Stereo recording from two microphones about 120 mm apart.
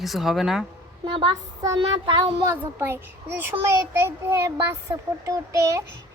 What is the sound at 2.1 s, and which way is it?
Speech, 45° right (ahead or behind).